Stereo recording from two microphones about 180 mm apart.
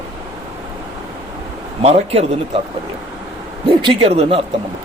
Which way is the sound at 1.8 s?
35° right (ahead or behind).